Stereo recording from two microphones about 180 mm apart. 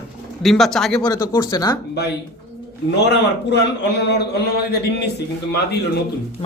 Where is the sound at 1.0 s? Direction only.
20° left (ahead or behind).